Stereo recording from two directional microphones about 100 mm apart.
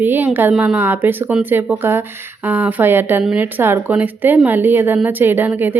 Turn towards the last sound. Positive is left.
turn(degrees=-20)  # may be behind; listen again after turning